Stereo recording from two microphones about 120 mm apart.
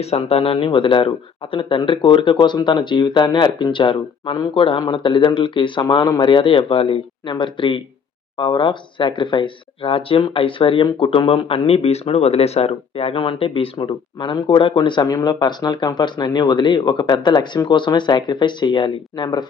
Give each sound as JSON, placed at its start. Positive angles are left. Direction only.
{"t": 0.0, "sound": "speech", "side_deg": 55}